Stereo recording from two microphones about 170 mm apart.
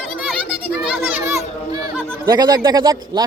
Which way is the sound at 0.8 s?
10° right (ahead or behind).